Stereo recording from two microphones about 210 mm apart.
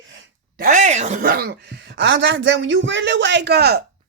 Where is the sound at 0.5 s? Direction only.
40° right (ahead or behind).